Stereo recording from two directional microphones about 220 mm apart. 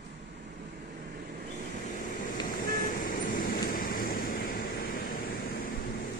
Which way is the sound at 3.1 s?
40° left (ahead or behind).